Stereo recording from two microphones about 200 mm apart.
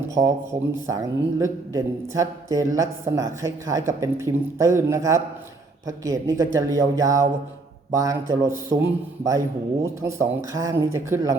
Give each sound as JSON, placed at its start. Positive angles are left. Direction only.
{"t": 0.2, "sound": "a man's voice", "side_deg": -15}
{"t": 9.8, "sound": "a man's voice", "side_deg": -15}